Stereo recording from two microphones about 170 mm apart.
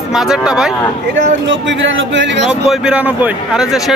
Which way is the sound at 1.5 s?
90° right.